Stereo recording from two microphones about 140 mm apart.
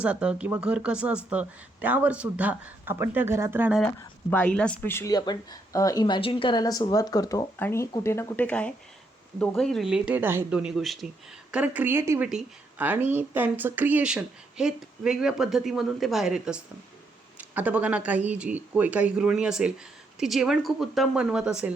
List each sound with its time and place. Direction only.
0.0 s speech: 10° right (ahead or behind)
4.3 s speech: 10° left (ahead or behind)
5.1 s speech: 30° left (ahead or behind); by 12.2 s 20° right (ahead or behind)
12.2 s speech: 5° right (ahead or behind)